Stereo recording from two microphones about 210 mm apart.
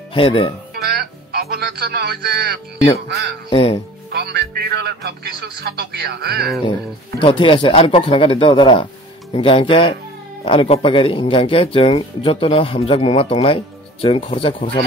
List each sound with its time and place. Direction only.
0.1 s speech: 25° left (ahead or behind)
0.7 s music: 45° right (ahead or behind)
3.4 s speech: 30° left (ahead or behind)
4.1 s speech: 50° right (ahead or behind)
7.2 s speech: 25° left (ahead or behind)